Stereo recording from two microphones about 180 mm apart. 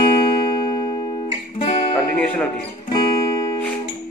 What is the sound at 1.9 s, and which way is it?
Speech, 10° left (ahead or behind).